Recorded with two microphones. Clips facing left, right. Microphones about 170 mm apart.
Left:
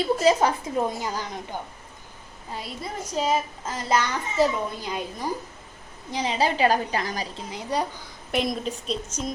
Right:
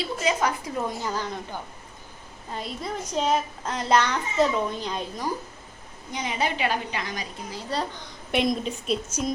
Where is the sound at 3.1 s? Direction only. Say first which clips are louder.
Even; 5° left (ahead or behind).